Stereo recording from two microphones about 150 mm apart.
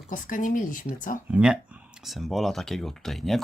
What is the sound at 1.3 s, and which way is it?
Speech, 5° right (ahead or behind).